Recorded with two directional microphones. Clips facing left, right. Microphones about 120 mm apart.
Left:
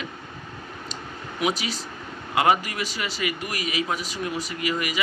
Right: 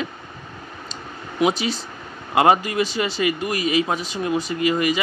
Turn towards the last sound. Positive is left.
turn(degrees=-30)  # may be behind; listen again after turning